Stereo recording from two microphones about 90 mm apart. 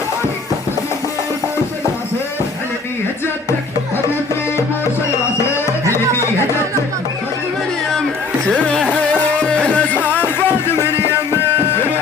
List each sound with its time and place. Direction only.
8.4 s carnatic music: 10° left (ahead or behind)
9.1 s music: 15° left (ahead or behind)
10.9 s music: 25° right (ahead or behind)